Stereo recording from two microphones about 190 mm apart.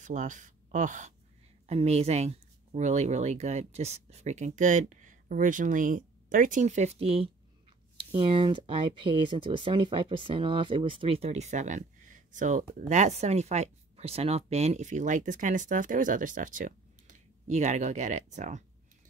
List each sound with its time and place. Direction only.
0.0 s speech: 40° right (ahead or behind)
8.3 s speech: 25° right (ahead or behind)